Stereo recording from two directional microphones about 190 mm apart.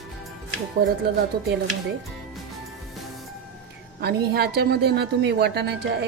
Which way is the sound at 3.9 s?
55° right (ahead or behind).